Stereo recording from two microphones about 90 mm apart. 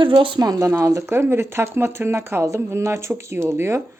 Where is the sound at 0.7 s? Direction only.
30° right (ahead or behind).